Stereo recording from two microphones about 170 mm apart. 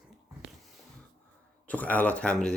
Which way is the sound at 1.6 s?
10° left (ahead or behind).